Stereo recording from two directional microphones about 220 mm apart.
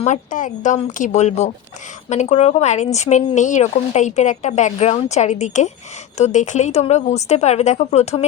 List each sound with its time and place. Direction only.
0.0 s a woman's voice: 35° left (ahead or behind)